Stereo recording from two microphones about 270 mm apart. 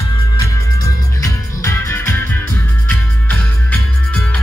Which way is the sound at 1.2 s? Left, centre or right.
Centre.